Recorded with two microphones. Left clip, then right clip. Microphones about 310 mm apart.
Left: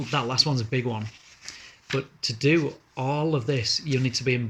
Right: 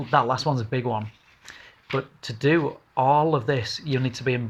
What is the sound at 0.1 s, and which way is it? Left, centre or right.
Speech, centre.